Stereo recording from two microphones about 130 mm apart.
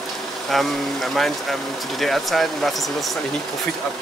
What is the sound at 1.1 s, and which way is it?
Speech, centre (ahead or behind).